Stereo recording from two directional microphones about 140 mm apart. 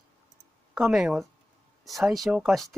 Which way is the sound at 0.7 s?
5° right (ahead or behind).